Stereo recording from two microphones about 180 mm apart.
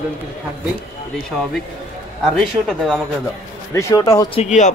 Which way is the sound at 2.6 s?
Centre (ahead or behind).